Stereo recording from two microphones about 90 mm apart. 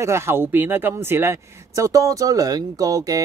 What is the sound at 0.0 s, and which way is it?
Speech, 30° right (ahead or behind).